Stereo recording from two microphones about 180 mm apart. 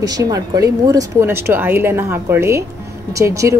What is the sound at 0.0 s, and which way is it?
Speech, 20° right (ahead or behind).